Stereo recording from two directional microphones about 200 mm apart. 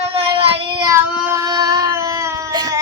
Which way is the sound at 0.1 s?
30° right (ahead or behind).